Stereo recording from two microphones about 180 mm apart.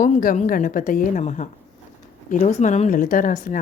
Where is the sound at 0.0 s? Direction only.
50° left (ahead or behind).